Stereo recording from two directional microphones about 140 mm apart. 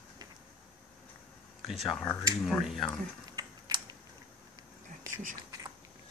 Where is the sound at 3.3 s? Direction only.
30° right (ahead or behind).